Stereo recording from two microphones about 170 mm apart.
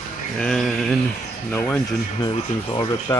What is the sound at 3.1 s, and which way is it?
Speech, 20° left (ahead or behind).